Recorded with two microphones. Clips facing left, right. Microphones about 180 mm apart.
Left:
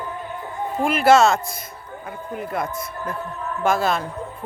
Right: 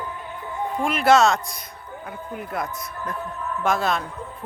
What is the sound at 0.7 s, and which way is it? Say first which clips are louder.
Speech: left 2 dB; centre (ahead or behind).